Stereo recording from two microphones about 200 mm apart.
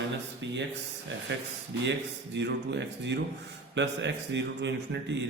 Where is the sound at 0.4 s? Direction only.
65° right (ahead or behind).